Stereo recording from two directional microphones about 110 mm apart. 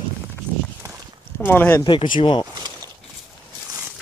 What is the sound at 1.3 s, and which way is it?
Speech, 15° left (ahead or behind).